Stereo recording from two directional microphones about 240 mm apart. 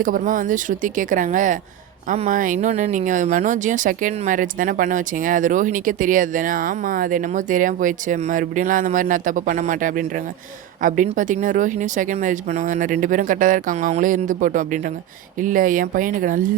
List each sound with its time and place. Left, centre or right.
0.0 s speech: right